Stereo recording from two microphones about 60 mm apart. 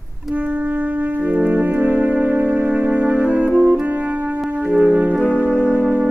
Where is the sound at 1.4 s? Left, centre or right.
Right.